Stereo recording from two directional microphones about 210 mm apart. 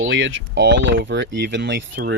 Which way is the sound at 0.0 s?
60° right (ahead or behind).